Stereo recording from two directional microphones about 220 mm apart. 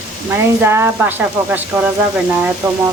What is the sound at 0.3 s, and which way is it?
Speech, 10° right (ahead or behind).